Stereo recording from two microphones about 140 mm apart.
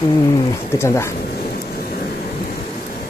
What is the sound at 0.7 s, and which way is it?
Speech, 20° left (ahead or behind).